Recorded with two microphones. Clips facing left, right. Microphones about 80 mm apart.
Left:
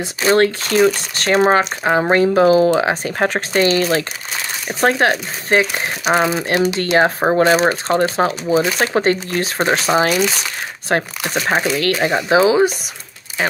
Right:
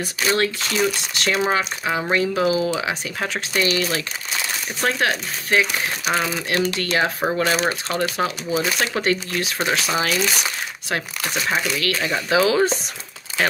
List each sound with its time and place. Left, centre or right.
0.0 s speech: left
6.8 s speech: left
12.2 s speech: left
13.4 s speech: centre